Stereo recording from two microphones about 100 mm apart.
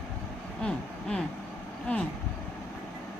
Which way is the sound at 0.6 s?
10° left (ahead or behind).